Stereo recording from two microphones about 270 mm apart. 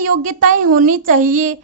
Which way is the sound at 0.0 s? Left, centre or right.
Right.